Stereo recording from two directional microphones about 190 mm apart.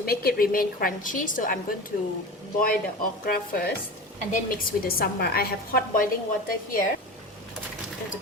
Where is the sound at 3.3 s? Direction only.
50° left (ahead or behind).